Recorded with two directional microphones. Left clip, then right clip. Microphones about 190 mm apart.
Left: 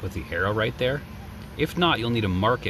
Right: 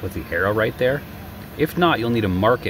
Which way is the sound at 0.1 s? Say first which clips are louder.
Right 5 dB; 5° right (ahead or behind).